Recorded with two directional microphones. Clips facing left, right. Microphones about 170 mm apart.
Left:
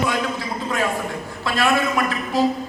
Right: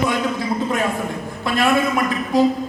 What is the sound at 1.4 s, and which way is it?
A woman's voice, 20° right (ahead or behind).